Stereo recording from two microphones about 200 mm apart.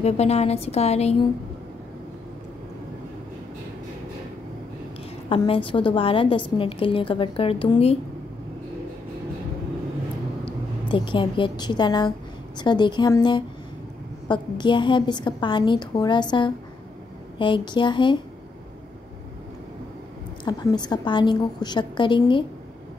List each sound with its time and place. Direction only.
0.0 s a woman's voice: 30° left (ahead or behind)
5.3 s a woman's voice: 25° left (ahead or behind)
10.4 s a woman's voice: 25° left (ahead or behind)
20.4 s a woman's voice: 20° left (ahead or behind)